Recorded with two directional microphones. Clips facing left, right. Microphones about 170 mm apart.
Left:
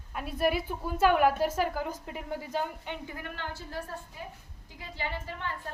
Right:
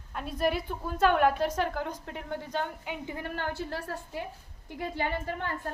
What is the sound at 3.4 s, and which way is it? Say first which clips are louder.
Speech: right 5 dB; 70° right (ahead or behind).